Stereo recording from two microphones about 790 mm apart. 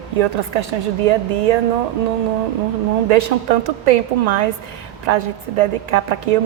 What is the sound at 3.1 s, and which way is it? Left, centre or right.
A woman's voice, right.